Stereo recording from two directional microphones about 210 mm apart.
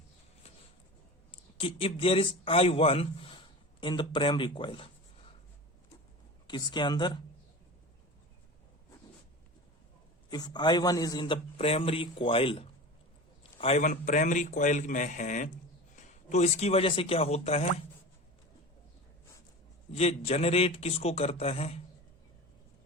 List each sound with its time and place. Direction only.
1.3 s a man's voice: 25° left (ahead or behind)
6.5 s a man's voice: 20° left (ahead or behind)
10.2 s a man's voice: 20° left (ahead or behind)
19.9 s a man's voice: 30° left (ahead or behind)